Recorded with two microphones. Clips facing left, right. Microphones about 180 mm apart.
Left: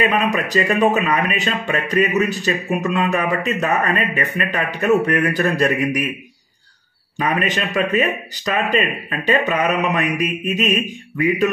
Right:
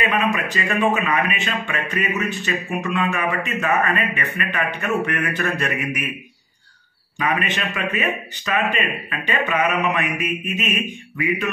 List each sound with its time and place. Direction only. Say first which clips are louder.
0.1 s speech: left 3 dB; 40° left (ahead or behind)
7.2 s speech: left 3 dB; 35° left (ahead or behind)